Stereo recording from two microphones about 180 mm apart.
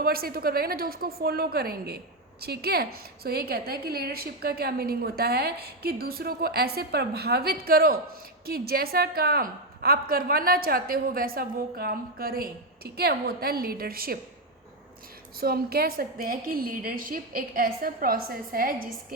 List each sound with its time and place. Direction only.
0.0 s a woman's voice: 55° right (ahead or behind)
15.4 s a woman's voice: 55° right (ahead or behind)